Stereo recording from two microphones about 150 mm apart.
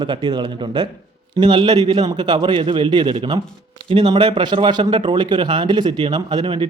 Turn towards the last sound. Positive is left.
turn(degrees=-35)  # may be behind; listen again after turning